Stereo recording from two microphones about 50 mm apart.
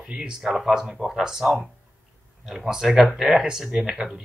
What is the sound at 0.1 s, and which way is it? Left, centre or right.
Speech, right.